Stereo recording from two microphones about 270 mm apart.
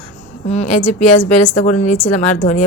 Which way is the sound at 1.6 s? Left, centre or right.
Left.